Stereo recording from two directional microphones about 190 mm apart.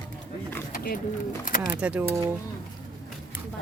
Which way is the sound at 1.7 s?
5° right (ahead or behind).